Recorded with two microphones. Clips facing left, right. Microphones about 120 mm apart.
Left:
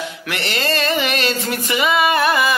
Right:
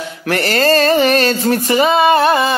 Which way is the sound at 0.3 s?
40° right (ahead or behind).